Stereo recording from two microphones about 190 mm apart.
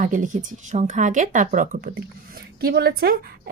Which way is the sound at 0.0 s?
45° right (ahead or behind).